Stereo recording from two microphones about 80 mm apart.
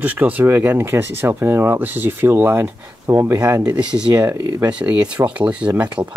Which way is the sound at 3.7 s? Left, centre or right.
Centre.